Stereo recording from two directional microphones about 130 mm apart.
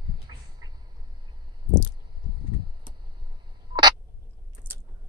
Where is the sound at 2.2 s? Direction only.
35° right (ahead or behind).